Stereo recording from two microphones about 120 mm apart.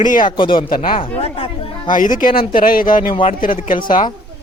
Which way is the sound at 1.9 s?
90° left.